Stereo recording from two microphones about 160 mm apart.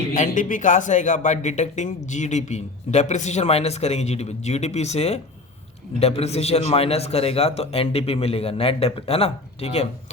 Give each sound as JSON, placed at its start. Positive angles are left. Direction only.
{"t": 0.2, "sound": "a man's voice", "side_deg": 55}